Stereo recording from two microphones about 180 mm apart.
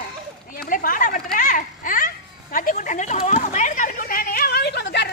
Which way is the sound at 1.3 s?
45° left (ahead or behind).